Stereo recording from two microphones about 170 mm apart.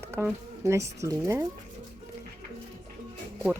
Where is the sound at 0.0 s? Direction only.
15° right (ahead or behind).